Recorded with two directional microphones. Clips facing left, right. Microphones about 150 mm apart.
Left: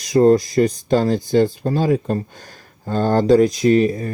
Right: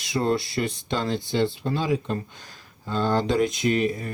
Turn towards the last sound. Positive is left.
turn(degrees=35)  # may be behind; listen again after turning